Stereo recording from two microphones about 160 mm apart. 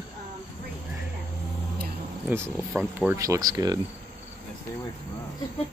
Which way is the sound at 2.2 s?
15° right (ahead or behind).